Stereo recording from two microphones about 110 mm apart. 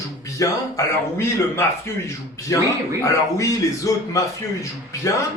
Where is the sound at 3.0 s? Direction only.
30° left (ahead or behind).